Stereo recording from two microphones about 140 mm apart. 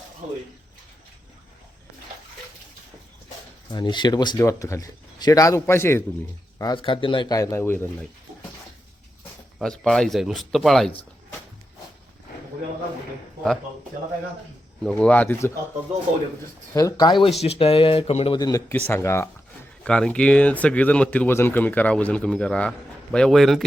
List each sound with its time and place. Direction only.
3.7 s speech: 30° left (ahead or behind)
6.6 s speech: 35° left (ahead or behind); by 7.9 s 15° left (ahead or behind)
9.6 s speech: 5° left (ahead or behind)
14.8 s speech: 5° left (ahead or behind)
16.7 s speech: 25° left (ahead or behind)
17.4 s speech: 45° left (ahead or behind)
18.3 s speech: 25° left (ahead or behind)
19.8 s speech: 5° left (ahead or behind)